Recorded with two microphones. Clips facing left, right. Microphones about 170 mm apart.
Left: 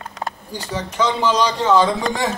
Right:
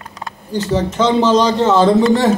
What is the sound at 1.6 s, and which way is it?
Speech, 5° right (ahead or behind).